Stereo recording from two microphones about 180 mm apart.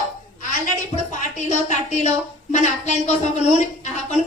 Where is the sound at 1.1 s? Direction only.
45° left (ahead or behind).